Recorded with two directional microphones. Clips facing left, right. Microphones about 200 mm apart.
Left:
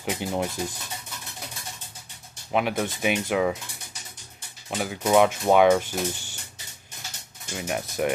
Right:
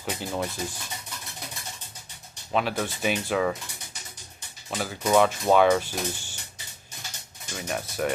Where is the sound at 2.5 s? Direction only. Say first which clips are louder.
Left 2 dB; 15° left (ahead or behind).